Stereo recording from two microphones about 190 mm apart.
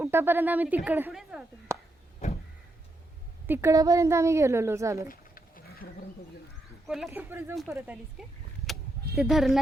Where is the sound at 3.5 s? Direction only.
15° right (ahead or behind).